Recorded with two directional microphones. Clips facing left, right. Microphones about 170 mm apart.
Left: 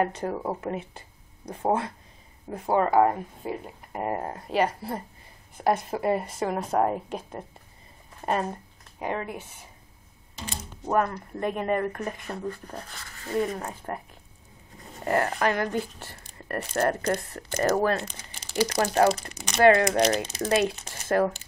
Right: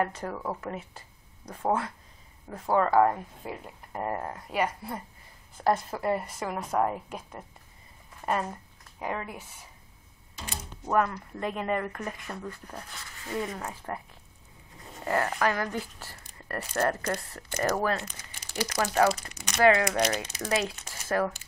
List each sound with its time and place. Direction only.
0.0 s speech: 25° left (ahead or behind)
4.2 s speech: 30° left (ahead or behind)
5.6 s speech: 20° left (ahead or behind)
10.3 s a sound: 30° left (ahead or behind)
11.3 s speech: 20° left (ahead or behind)
15.0 s speech: 30° left (ahead or behind)